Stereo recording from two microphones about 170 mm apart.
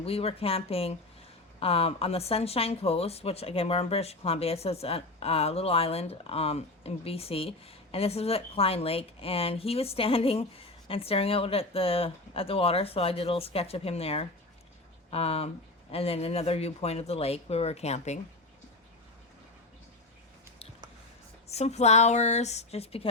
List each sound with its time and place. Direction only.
0.0 s speech: 35° left (ahead or behind)
21.4 s speech: 40° left (ahead or behind)